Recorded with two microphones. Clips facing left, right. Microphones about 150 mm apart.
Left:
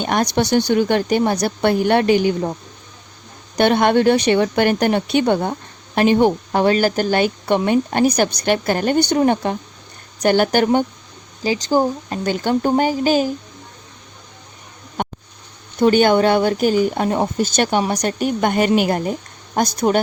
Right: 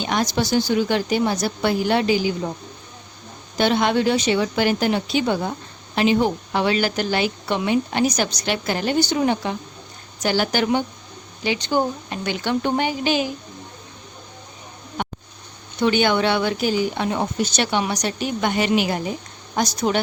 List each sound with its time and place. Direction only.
0.0 s a woman's voice: 55° left (ahead or behind)
3.5 s a woman's voice: 55° left (ahead or behind)
11.4 s speech: 35° left (ahead or behind)
15.8 s a woman's voice: 45° left (ahead or behind)